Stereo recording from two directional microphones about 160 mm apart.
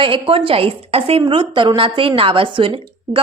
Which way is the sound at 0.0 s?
35° right (ahead or behind).